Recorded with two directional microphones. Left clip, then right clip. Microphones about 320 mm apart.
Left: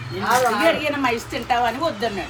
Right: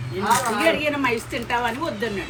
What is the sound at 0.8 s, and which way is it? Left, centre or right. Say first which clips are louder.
A woman's voice: left 1 dB; left.